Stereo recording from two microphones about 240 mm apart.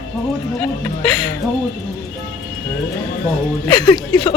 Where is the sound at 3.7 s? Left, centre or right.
Centre.